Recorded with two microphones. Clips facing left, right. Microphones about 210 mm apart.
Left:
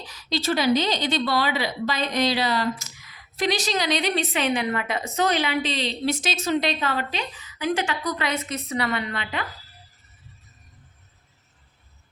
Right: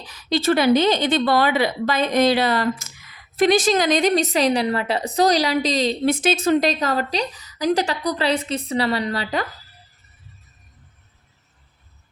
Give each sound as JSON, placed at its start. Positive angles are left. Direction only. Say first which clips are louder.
{"t": 0.1, "sound": "a woman's voice", "louder": "right 6 dB", "side_deg": -55}